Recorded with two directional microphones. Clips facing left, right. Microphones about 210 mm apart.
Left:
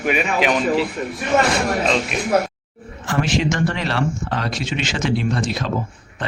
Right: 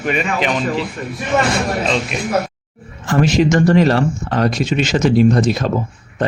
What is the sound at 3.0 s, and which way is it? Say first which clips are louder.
Speech: right 6 dB; 40° right (ahead or behind).